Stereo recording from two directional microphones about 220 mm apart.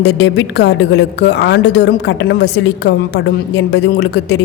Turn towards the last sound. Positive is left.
turn(degrees=50)  # may be behind; listen again after turning